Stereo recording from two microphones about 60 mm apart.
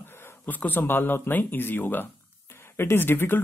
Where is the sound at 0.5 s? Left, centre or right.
Left.